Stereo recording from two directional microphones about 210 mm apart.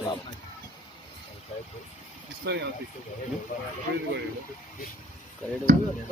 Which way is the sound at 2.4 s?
50° right (ahead or behind).